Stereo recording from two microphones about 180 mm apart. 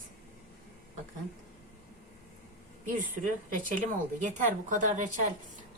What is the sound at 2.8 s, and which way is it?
A woman's voice, 50° right (ahead or behind).